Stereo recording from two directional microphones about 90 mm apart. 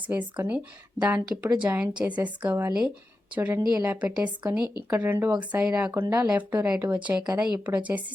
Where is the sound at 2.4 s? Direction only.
30° right (ahead or behind).